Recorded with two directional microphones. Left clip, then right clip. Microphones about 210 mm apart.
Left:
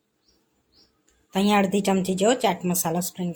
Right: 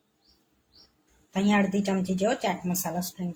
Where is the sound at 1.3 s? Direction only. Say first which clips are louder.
Left 5 dB; 40° left (ahead or behind).